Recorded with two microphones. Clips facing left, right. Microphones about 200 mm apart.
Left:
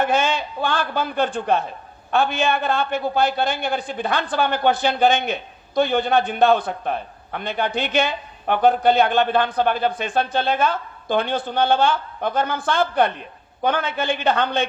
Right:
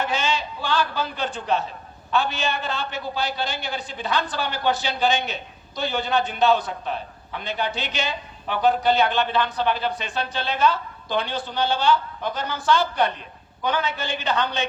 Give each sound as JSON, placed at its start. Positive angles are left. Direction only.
{"t": 0.0, "sound": "a man's voice", "side_deg": 55}